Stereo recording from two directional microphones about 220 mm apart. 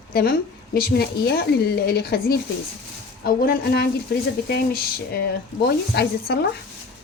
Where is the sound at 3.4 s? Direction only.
45° left (ahead or behind).